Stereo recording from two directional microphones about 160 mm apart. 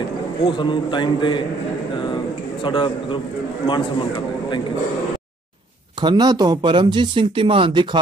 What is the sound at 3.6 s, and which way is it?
A man's voice, 30° left (ahead or behind).